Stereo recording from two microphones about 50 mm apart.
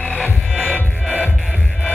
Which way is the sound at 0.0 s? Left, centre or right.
Left.